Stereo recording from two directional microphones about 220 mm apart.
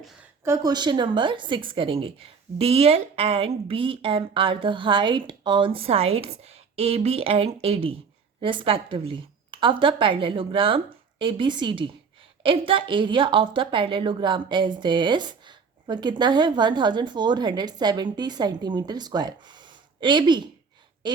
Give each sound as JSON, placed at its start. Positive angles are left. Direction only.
{"t": 0.4, "sound": "a woman's voice", "side_deg": -15}